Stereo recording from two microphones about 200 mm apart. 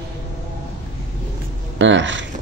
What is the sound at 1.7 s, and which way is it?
Speech, 70° right (ahead or behind).